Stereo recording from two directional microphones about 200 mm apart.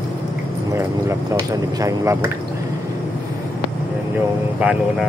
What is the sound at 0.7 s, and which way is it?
Speech, 15° right (ahead or behind).